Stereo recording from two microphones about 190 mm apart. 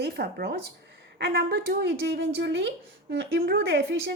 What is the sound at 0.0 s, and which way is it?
A woman's voice, 55° right (ahead or behind).